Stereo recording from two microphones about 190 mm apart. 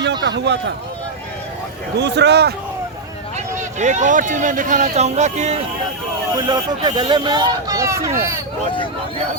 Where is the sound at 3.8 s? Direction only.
40° right (ahead or behind).